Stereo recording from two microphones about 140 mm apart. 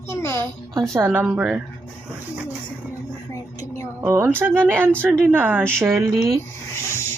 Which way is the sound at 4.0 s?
20° right (ahead or behind).